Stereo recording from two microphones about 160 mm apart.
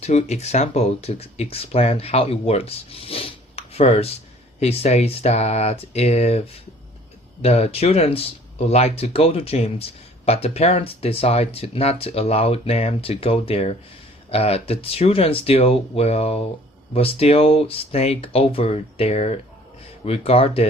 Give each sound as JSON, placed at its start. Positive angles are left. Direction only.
{"t": 0.0, "sound": "speech", "side_deg": 45}
{"t": 7.4, "sound": "speech", "side_deg": 40}